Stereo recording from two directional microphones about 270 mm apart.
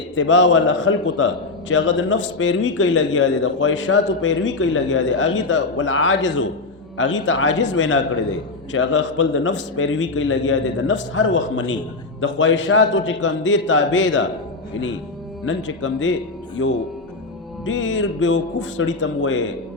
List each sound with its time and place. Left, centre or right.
0.2 s a man's voice: left
15.4 s a man's voice: left
17.7 s a man's voice: left